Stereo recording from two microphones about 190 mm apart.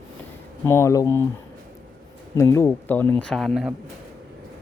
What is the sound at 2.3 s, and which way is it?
Speech, 15° left (ahead or behind).